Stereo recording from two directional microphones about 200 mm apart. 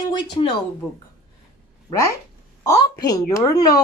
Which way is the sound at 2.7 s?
20° left (ahead or behind).